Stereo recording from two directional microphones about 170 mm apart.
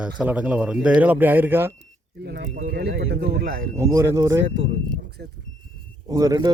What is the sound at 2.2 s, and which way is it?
Speech, 75° right (ahead or behind).